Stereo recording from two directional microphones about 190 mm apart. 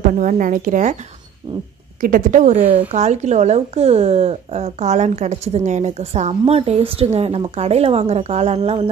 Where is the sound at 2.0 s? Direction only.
45° right (ahead or behind).